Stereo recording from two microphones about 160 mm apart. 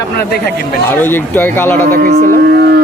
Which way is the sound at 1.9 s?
65° right (ahead or behind).